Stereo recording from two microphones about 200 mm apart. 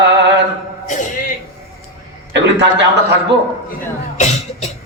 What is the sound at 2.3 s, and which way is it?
Speech, 60° right (ahead or behind).